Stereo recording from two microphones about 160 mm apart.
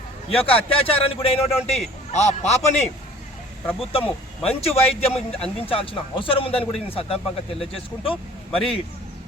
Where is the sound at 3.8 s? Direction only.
35° left (ahead or behind).